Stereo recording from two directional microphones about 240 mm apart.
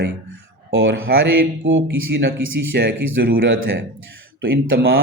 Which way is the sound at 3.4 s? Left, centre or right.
Right.